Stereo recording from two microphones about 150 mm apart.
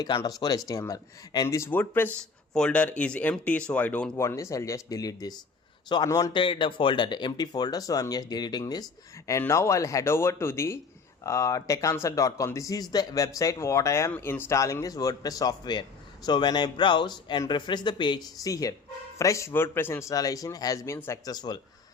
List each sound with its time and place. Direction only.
0.2 s speech: 25° left (ahead or behind)
6.3 s speech: 35° left (ahead or behind)